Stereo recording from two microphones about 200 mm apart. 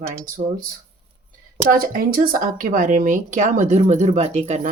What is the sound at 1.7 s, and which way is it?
Speech, 45° right (ahead or behind).